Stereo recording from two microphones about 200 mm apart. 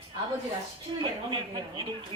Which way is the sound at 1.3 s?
20° right (ahead or behind).